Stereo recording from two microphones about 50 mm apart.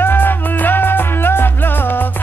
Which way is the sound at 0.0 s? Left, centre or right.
Left.